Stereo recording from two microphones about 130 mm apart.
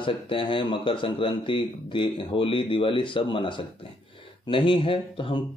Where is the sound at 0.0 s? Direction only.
40° left (ahead or behind).